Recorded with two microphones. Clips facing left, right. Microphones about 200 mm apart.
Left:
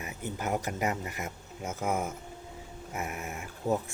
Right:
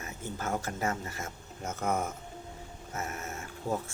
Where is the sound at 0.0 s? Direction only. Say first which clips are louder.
Left 2 dB; 15° left (ahead or behind).